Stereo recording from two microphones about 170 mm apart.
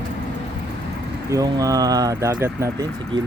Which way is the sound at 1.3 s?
20° right (ahead or behind).